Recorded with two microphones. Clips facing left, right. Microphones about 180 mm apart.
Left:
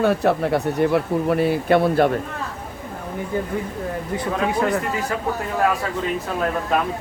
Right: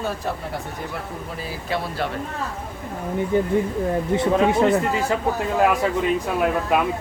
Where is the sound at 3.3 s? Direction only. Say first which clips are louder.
Right 5 dB; 25° right (ahead or behind).